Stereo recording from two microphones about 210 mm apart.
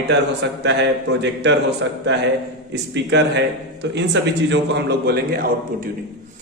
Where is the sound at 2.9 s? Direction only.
55° right (ahead or behind).